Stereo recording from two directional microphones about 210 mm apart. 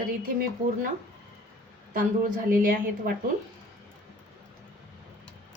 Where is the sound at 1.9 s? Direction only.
40° right (ahead or behind).